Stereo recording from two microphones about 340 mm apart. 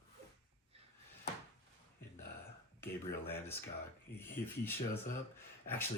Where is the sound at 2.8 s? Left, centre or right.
Centre.